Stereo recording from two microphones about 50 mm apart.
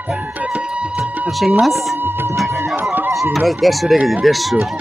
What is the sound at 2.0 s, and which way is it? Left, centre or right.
Music, right.